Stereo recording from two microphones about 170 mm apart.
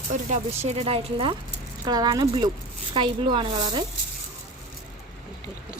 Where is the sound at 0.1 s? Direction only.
45° right (ahead or behind); by 3.8 s 25° right (ahead or behind).